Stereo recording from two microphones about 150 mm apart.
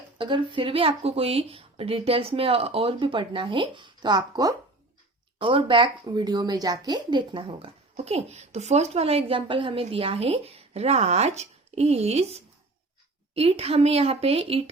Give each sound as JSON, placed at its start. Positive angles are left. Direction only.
{"t": 0.2, "sound": "a woman's voice", "side_deg": -35}